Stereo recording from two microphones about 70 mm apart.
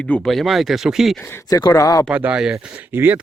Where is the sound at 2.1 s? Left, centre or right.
Centre.